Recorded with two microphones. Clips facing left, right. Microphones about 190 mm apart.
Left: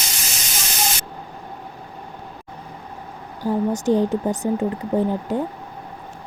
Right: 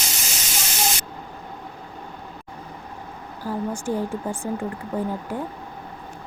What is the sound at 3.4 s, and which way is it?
Speech, 20° left (ahead or behind).